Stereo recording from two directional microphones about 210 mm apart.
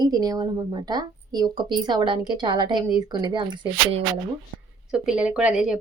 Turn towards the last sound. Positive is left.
turn(degrees=-5)  # may be behind; listen again after turning